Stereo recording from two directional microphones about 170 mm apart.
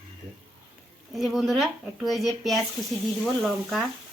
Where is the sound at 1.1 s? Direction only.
Centre (ahead or behind).